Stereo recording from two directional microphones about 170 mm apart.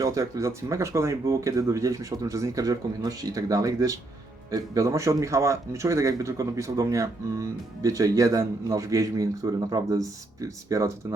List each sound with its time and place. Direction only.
0.0 s speech: 20° right (ahead or behind)